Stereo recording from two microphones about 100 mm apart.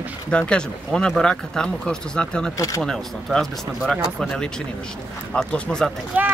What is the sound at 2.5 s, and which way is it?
Speech, 35° left (ahead or behind).